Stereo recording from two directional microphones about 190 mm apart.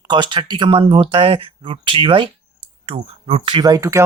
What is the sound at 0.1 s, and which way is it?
Speech, 25° right (ahead or behind).